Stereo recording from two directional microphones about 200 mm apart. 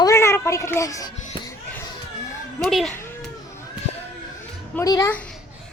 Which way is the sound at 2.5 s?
Centre (ahead or behind).